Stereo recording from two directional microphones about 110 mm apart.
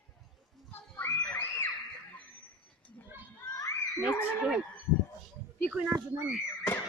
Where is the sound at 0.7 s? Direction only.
15° left (ahead or behind).